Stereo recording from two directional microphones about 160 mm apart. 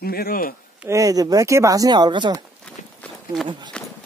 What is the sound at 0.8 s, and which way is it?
Speech, 20° right (ahead or behind).